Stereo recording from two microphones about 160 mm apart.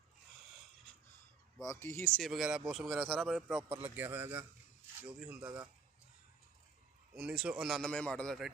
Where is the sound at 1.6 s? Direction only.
20° left (ahead or behind).